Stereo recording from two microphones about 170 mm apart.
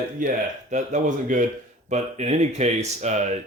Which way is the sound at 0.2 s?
50° right (ahead or behind).